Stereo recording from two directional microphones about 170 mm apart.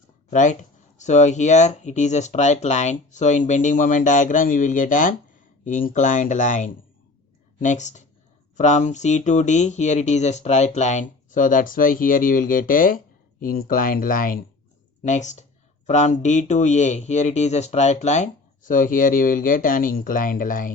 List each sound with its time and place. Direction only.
0.3 s speech: 45° left (ahead or behind)